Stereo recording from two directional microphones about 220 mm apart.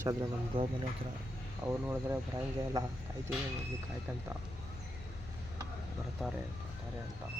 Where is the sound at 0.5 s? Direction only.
25° right (ahead or behind).